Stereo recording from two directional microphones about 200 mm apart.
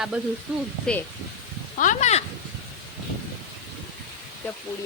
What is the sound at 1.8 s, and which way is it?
Speech, 35° left (ahead or behind).